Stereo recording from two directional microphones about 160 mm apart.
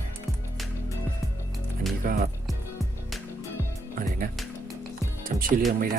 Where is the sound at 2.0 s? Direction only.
65° right (ahead or behind).